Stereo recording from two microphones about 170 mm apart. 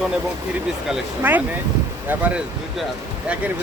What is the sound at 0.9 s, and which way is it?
Speech, 10° right (ahead or behind).